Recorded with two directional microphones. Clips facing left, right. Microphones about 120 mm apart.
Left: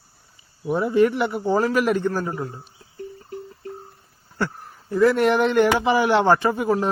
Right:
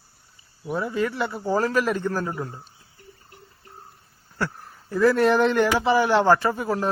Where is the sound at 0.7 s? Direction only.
25° left (ahead or behind).